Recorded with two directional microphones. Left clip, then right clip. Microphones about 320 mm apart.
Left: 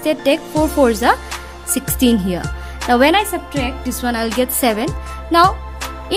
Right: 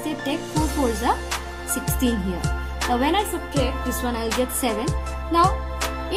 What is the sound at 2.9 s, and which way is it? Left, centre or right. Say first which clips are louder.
Speech: left 9 dB; left.